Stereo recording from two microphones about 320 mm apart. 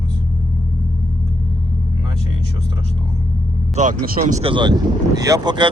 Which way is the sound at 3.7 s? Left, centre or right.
Right.